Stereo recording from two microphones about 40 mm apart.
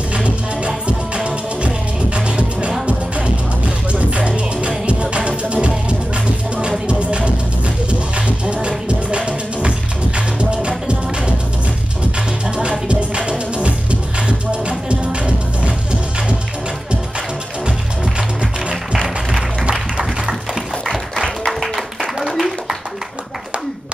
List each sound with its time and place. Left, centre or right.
0.1 s music: right
12.4 s music: right
20.0 s music: centre
21.2 s music: centre
22.3 s a sound: centre